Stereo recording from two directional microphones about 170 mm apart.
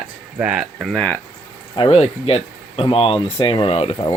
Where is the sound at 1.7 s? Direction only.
35° left (ahead or behind).